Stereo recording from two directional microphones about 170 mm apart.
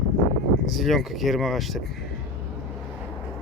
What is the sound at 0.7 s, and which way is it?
Speech, centre (ahead or behind).